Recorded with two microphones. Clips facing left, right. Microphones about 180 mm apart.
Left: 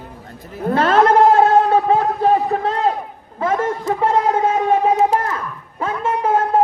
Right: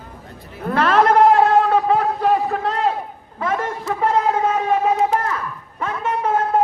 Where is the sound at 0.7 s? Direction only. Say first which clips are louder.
Left 2 dB; 25° left (ahead or behind).